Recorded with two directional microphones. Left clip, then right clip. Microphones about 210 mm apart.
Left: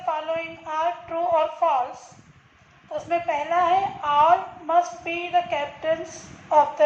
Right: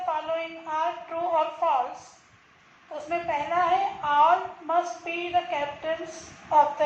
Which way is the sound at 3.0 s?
50° left (ahead or behind).